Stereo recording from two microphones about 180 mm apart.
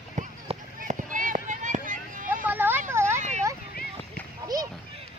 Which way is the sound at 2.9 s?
15° right (ahead or behind).